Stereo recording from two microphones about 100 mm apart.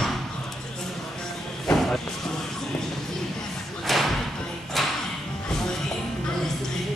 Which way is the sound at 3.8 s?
Centre (ahead or behind).